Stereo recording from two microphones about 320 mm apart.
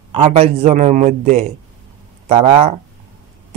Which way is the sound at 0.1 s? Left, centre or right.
Centre.